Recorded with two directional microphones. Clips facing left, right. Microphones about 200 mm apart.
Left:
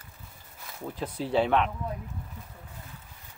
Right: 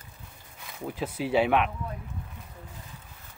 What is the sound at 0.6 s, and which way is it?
Speech, 5° right (ahead or behind).